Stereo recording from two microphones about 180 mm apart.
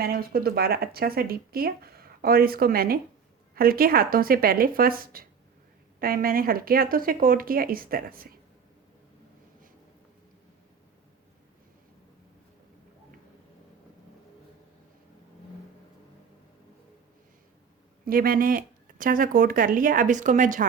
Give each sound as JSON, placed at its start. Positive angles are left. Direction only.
{"t": 0.0, "sound": "speech", "side_deg": -55}
{"t": 18.0, "sound": "speech", "side_deg": -55}